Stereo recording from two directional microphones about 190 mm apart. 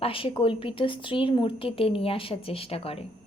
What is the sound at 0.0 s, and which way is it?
Speech, 30° left (ahead or behind).